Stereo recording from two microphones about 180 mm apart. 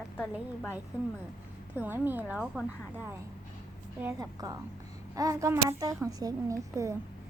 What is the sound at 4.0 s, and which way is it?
A woman's voice, 15° right (ahead or behind).